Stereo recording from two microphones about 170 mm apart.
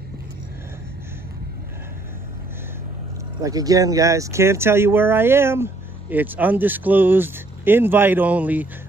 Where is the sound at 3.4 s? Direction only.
20° right (ahead or behind).